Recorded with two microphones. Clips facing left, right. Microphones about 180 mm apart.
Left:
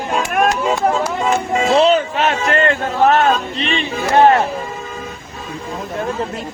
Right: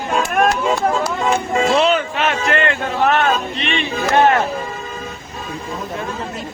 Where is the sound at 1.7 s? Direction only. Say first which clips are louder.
Left 5 dB; 40° left (ahead or behind).